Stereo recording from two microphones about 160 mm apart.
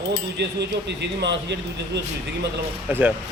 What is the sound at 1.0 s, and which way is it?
A man's voice, 90° right.